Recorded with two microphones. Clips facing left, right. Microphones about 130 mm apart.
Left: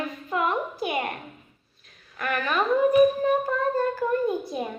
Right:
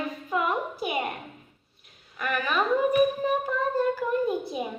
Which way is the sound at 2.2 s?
5° right (ahead or behind).